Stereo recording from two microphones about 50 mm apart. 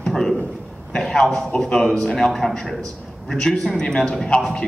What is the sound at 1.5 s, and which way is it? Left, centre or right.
Speech, left.